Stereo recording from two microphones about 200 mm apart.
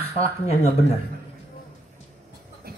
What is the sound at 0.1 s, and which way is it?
Speech, 30° left (ahead or behind).